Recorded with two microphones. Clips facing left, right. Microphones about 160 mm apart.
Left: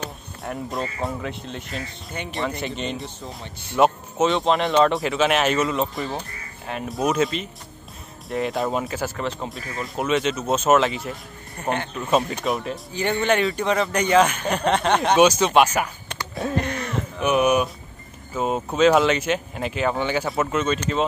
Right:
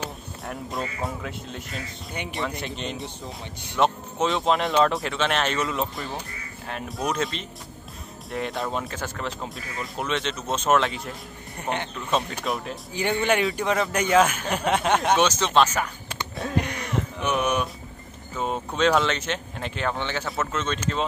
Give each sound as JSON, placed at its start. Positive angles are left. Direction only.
{"t": 0.0, "sound": "music", "side_deg": 0}
{"t": 1.0, "sound": "speech", "side_deg": 0}
{"t": 12.9, "sound": "speech", "side_deg": -10}
{"t": 15.1, "sound": "speech", "side_deg": 10}
{"t": 16.5, "sound": "throat clearing", "side_deg": -15}
{"t": 17.2, "sound": "speech", "side_deg": 10}